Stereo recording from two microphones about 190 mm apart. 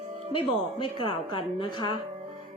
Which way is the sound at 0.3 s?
25° left (ahead or behind).